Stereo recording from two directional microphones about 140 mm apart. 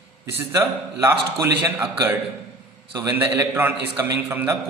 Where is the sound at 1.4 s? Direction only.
20° right (ahead or behind).